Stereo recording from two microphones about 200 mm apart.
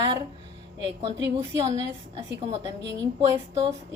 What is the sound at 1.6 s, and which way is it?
Speech, 30° right (ahead or behind).